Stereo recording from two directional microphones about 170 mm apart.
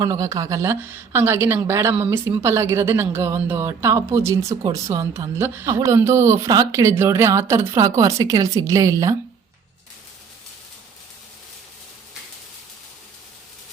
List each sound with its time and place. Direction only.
0.0 s a woman's voice: 20° right (ahead or behind)